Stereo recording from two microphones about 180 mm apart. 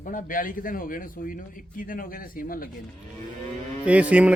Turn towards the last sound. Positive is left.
turn(degrees=-5)  # may be behind; listen again after turning